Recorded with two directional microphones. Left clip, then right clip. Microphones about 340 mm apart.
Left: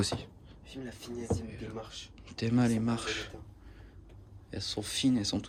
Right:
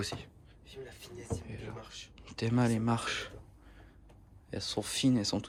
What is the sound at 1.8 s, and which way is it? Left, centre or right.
Speech, centre.